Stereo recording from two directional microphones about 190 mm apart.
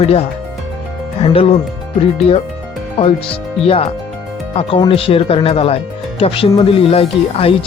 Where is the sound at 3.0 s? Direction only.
30° left (ahead or behind).